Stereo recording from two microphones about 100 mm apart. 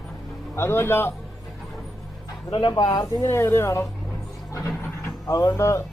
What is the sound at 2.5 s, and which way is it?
Speech, 50° left (ahead or behind).